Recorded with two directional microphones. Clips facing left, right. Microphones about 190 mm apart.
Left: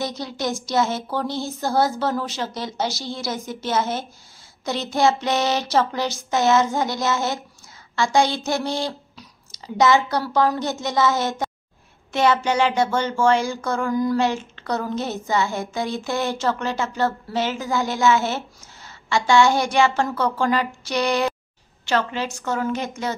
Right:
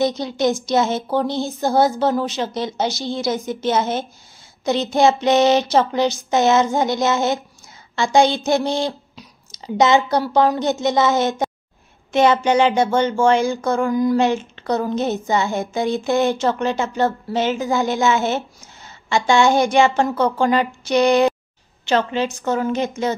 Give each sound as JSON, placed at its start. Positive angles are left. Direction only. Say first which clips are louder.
{"t": 0.0, "sound": "speech", "louder": "right 8 dB", "side_deg": -20}